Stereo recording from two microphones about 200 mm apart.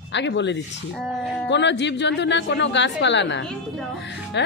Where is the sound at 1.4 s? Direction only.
60° left (ahead or behind).